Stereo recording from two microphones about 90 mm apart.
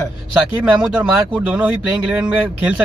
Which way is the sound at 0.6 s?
10° right (ahead or behind).